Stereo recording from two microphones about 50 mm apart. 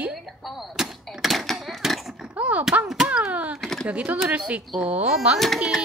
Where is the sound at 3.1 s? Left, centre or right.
Right.